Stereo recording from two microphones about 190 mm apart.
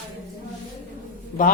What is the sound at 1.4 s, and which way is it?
Speech, 45° left (ahead or behind).